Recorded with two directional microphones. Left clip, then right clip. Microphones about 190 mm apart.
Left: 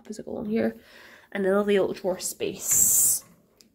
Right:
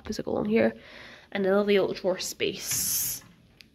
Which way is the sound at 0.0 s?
25° right (ahead or behind).